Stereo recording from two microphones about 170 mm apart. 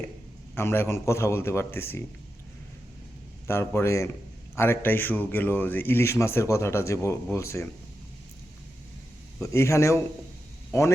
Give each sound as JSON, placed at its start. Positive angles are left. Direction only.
{"t": 0.5, "sound": "speech", "side_deg": 15}
{"t": 3.4, "sound": "speech", "side_deg": 15}
{"t": 9.4, "sound": "speech", "side_deg": 15}